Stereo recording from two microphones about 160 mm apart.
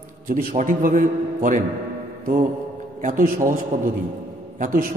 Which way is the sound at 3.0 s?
55° right (ahead or behind).